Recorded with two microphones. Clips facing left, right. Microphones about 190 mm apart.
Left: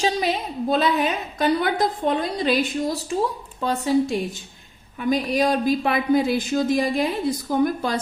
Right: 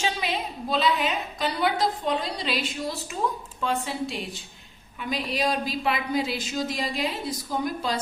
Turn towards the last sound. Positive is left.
turn(degrees=55)  # may be behind; listen again after turning